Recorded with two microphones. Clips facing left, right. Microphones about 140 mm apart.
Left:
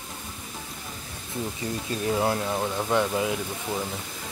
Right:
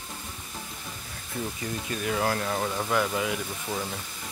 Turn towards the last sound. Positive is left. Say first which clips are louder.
# left 2 dB
turn(degrees=20)  # may be behind; listen again after turning